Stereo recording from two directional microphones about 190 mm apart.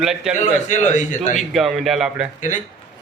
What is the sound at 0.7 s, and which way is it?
Speech, 40° left (ahead or behind).